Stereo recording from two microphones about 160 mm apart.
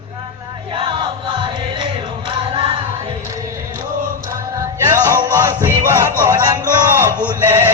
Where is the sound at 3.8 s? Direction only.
60° right (ahead or behind).